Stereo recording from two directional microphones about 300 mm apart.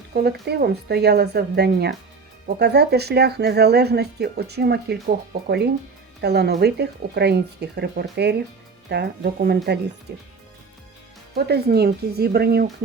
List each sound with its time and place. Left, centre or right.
0.1 s speech: right
11.3 s speech: right